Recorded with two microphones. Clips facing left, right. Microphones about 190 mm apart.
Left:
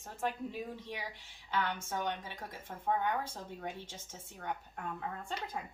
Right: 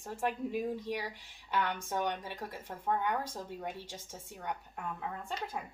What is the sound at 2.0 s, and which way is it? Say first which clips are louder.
Speech: right 3 dB; 10° right (ahead or behind).